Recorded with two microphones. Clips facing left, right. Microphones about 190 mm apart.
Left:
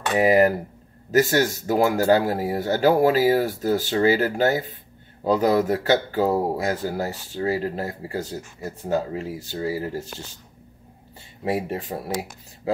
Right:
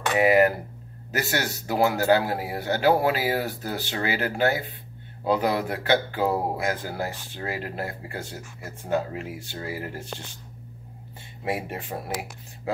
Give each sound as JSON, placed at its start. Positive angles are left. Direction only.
{"t": 0.1, "sound": "speech", "side_deg": 35}
{"t": 11.4, "sound": "speech", "side_deg": 35}